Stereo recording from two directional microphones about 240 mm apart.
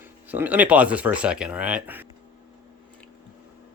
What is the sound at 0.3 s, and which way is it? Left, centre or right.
Speech, centre.